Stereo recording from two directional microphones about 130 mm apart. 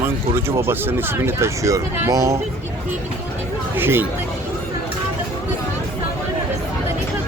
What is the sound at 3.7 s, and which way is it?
Speech, 15° right (ahead or behind).